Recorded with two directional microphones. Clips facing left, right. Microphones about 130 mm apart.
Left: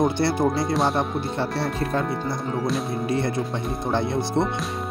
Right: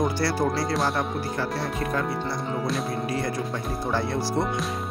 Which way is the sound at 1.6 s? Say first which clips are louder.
Left 3 dB; 30° left (ahead or behind).